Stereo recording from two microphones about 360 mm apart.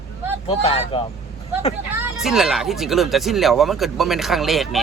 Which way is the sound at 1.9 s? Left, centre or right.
Centre.